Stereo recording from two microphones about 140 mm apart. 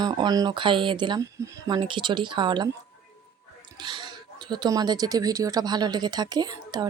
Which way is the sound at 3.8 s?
30° right (ahead or behind).